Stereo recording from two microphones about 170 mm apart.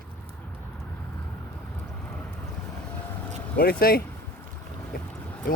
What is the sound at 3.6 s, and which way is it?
Speech, 60° left (ahead or behind).